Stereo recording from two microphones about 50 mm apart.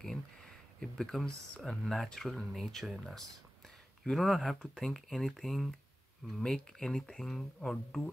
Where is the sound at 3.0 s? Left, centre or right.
Centre.